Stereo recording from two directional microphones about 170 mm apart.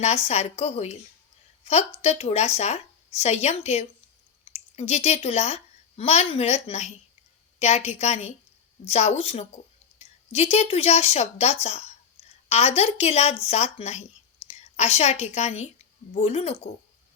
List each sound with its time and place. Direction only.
0.0 s speech: 40° left (ahead or behind)
2.0 s a woman's voice: 40° left (ahead or behind)